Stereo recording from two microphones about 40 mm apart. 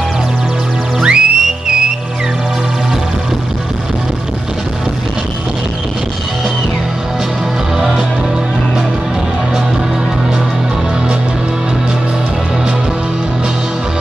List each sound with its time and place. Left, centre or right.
1.0 s music: centre